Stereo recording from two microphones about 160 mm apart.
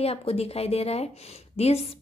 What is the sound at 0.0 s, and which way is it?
A woman's voice, 40° left (ahead or behind).